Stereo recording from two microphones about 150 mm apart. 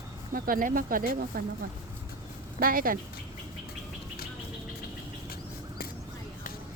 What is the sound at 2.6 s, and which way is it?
Speech, 70° right (ahead or behind).